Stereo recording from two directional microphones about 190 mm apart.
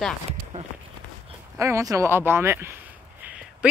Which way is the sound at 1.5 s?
15° right (ahead or behind).